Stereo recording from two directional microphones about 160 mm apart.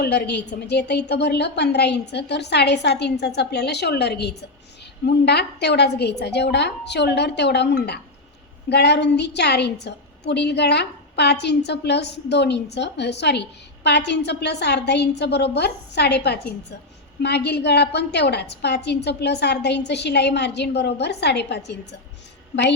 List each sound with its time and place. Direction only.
0.0 s a woman's voice: 90° left